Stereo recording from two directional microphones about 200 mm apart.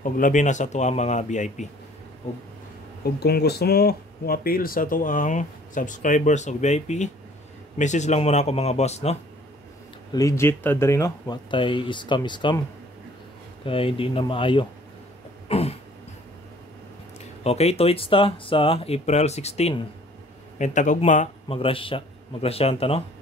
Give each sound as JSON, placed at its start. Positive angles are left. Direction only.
{"t": 0.0, "sound": "speech", "side_deg": 40}
{"t": 3.0, "sound": "speech", "side_deg": 50}
{"t": 10.1, "sound": "a man's voice", "side_deg": 15}
{"t": 13.7, "sound": "a man's voice", "side_deg": 25}
{"t": 15.4, "sound": "cough", "side_deg": 30}
{"t": 17.4, "sound": "a man's voice", "side_deg": 30}